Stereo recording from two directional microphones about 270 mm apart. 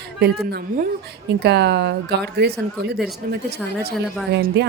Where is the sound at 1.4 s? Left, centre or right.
Right.